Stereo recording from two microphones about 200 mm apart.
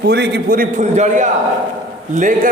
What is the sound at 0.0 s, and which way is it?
A man's voice, 55° right (ahead or behind).